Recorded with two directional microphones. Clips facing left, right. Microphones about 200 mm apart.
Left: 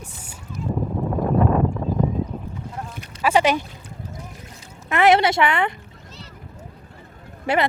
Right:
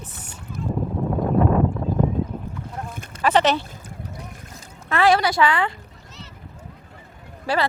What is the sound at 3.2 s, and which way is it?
Speech, 10° left (ahead or behind).